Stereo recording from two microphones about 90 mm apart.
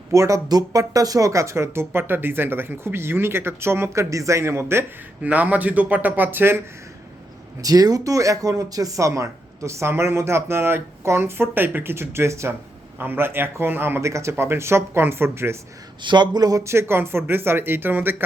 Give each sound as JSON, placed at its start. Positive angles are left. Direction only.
{"t": 0.1, "sound": "speech", "side_deg": -35}
{"t": 5.2, "sound": "speech", "side_deg": -15}
{"t": 7.6, "sound": "speech", "side_deg": -45}
{"t": 16.0, "sound": "speech", "side_deg": -55}